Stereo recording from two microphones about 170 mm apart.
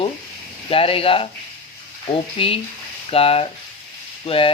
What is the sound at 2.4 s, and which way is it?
Speech, 30° left (ahead or behind).